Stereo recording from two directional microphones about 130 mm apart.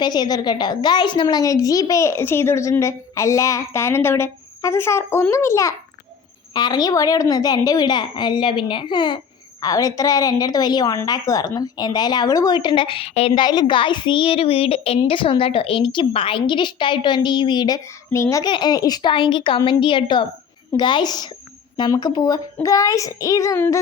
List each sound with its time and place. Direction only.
0.0 s a woman's voice: 35° left (ahead or behind)
18.1 s a woman's voice: 25° left (ahead or behind)
18.4 s a woman's voice: 35° left (ahead or behind)